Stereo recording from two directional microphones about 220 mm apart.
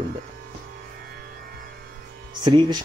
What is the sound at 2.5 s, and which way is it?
Speech, 20° right (ahead or behind).